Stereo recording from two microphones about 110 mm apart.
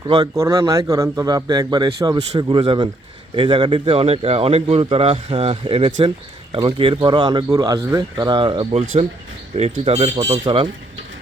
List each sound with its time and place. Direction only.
0.3 s a man's voice: 30° right (ahead or behind); by 8.6 s 50° right (ahead or behind)
9.6 s speech: 70° right (ahead or behind)
10.3 s speech: 55° right (ahead or behind)